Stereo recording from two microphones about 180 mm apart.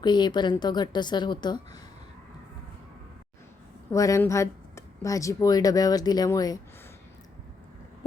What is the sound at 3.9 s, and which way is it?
A woman's voice, 20° left (ahead or behind).